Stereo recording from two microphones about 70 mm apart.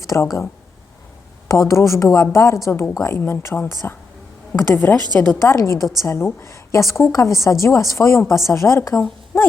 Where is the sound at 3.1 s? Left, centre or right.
Left.